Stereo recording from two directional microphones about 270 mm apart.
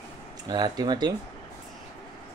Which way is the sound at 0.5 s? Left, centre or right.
Centre.